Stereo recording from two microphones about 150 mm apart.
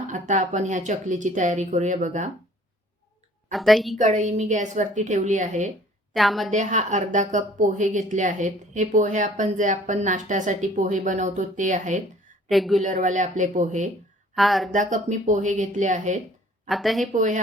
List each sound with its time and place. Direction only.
0.1 s speech: 55° right (ahead or behind)
3.5 s a woman's voice: centre (ahead or behind)
3.9 s speech: 55° right (ahead or behind)
6.1 s a woman's voice: centre (ahead or behind)
6.5 s speech: 55° right (ahead or behind)
12.5 s a woman's voice: centre (ahead or behind)
12.8 s speech: 55° right (ahead or behind)
14.3 s a woman's voice: centre (ahead or behind)
14.7 s speech: 55° right (ahead or behind)
16.6 s a woman's voice: centre (ahead or behind)
17.1 s speech: 55° right (ahead or behind)